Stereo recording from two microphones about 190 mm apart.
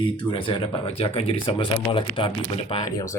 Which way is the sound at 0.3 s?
25° left (ahead or behind).